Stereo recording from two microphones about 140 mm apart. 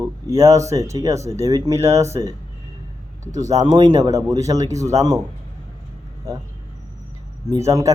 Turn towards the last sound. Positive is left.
turn(degrees=-25)  # may be behind; listen again after turning